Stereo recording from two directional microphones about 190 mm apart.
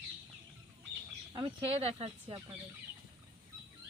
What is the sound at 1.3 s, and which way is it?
Speech, 25° right (ahead or behind).